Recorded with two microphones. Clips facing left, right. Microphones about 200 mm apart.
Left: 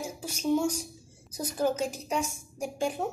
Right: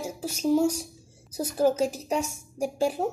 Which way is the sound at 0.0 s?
40° right (ahead or behind).